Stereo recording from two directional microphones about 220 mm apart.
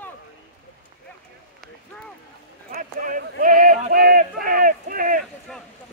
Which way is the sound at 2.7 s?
40° right (ahead or behind).